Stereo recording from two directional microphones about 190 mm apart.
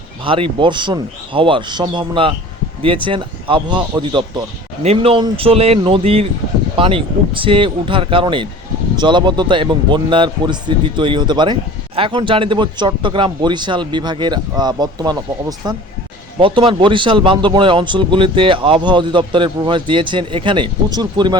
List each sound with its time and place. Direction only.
0.3 s a man's voice: 30° right (ahead or behind)